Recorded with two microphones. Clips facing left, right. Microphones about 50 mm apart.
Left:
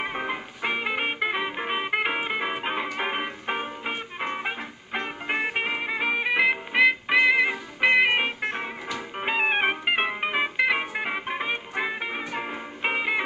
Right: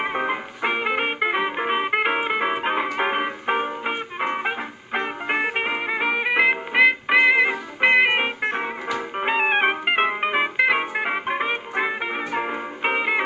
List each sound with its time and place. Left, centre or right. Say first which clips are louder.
0.0 s music: right 5 dB; right